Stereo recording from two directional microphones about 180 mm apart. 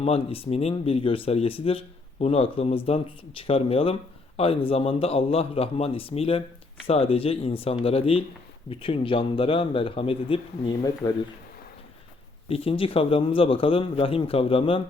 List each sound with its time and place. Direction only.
0.0 s speech: 35° left (ahead or behind)
12.5 s speech: 35° left (ahead or behind)